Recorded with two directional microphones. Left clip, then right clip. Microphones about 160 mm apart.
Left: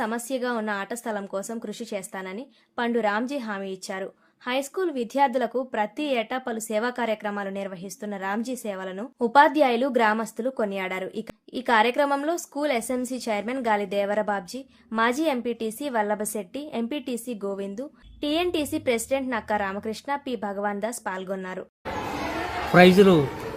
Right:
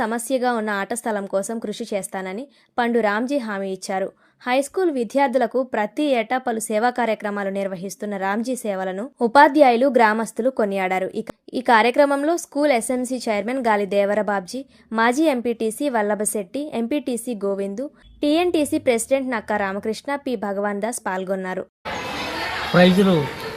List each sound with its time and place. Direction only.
0.0 s a woman's voice: 35° right (ahead or behind)
22.7 s a man's voice: 30° left (ahead or behind)